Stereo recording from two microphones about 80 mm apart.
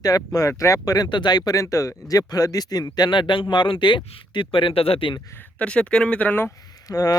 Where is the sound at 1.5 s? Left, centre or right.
Left.